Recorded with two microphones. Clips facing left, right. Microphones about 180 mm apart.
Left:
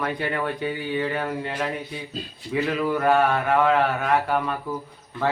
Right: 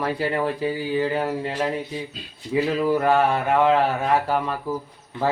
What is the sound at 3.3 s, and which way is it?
Speech, 25° right (ahead or behind).